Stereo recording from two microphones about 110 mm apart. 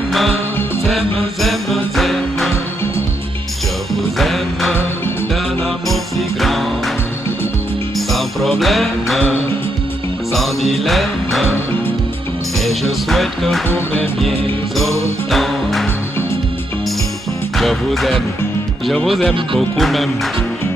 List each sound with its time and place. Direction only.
1.4 s jingle bell: centre (ahead or behind)
3.9 s music: centre (ahead or behind)
5.9 s music: centre (ahead or behind)
8.1 s music: centre (ahead or behind)
10.8 s music: centre (ahead or behind)
12.5 s music: centre (ahead or behind)
13.7 s music: 20° left (ahead or behind)
14.8 s music: centre (ahead or behind)
17.6 s music: centre (ahead or behind)